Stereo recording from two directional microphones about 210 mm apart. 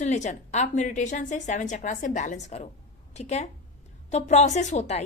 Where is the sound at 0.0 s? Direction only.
35° left (ahead or behind).